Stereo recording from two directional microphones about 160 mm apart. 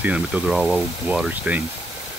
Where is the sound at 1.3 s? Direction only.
10° right (ahead or behind).